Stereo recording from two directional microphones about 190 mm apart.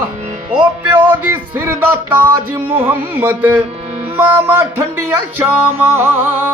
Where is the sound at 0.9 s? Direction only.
10° right (ahead or behind).